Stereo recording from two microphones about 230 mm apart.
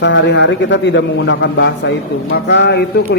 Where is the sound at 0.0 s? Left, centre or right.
Left.